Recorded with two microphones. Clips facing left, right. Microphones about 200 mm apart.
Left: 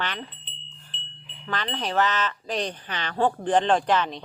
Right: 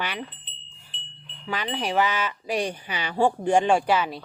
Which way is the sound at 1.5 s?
10° right (ahead or behind).